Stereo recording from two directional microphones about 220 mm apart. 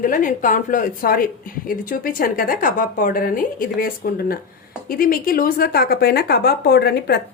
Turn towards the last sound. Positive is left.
turn(degrees=45)  # may be behind; listen again after turning